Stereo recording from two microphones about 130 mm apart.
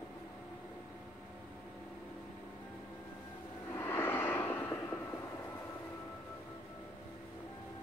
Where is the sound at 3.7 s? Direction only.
15° left (ahead or behind).